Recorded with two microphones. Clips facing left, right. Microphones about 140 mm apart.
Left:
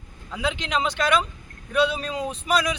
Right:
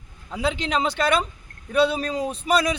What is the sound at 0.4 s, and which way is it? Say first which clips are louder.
Speech: right 2 dB; 35° right (ahead or behind).